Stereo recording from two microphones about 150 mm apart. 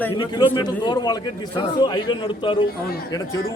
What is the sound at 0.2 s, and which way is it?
A man's voice, 30° left (ahead or behind).